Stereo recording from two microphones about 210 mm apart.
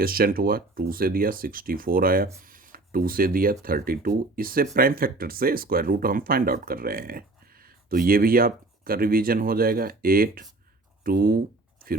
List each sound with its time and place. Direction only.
0.0 s speech: 45° right (ahead or behind)